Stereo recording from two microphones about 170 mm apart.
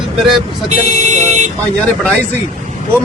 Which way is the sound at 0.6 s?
45° right (ahead or behind).